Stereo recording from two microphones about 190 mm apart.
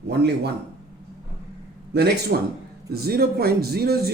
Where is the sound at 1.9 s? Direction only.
60° right (ahead or behind).